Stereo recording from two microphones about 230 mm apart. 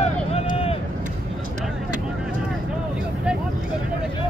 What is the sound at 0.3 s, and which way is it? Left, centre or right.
Run, left.